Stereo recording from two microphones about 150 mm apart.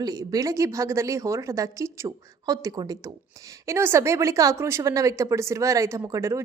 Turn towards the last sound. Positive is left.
turn(degrees=-20)  # may be behind; listen again after turning